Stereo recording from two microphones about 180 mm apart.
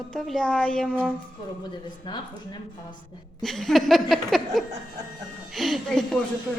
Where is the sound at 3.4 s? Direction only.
Centre (ahead or behind).